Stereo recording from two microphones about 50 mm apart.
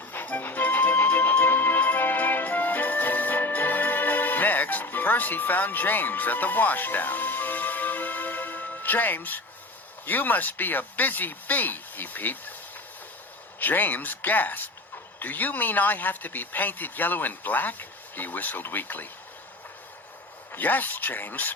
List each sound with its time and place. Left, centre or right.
0.1 s music: left
10.1 s speech: left
13.6 s speech: left
20.5 s speech: left